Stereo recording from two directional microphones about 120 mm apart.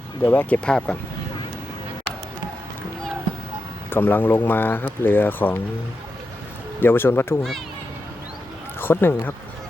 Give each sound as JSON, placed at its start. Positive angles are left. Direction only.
{"t": 0.3, "sound": "speech", "side_deg": 10}
{"t": 3.8, "sound": "speech", "side_deg": 15}
{"t": 6.7, "sound": "speech", "side_deg": 20}
{"t": 8.8, "sound": "speech", "side_deg": 20}